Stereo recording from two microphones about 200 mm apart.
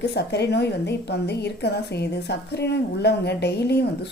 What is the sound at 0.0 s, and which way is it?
A woman's voice, 55° left (ahead or behind).